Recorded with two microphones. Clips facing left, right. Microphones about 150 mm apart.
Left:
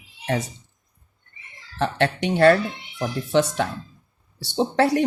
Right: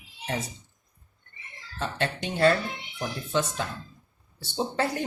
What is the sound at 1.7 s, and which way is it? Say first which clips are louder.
Speech: left 8 dB; 70° left (ahead or behind).